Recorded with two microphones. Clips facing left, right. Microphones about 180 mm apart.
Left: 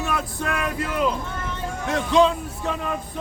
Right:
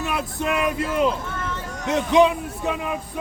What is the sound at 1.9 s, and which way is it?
Music, 20° right (ahead or behind).